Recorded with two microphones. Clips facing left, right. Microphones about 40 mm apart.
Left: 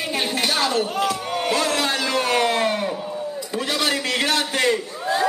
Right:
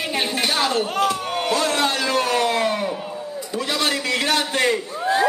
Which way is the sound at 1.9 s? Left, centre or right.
Right.